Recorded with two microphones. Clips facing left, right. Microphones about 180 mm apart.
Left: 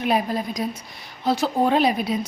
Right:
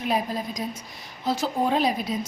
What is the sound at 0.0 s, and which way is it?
A woman's voice, 70° left (ahead or behind).